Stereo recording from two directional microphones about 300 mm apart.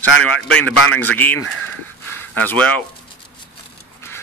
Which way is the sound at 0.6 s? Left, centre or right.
Left.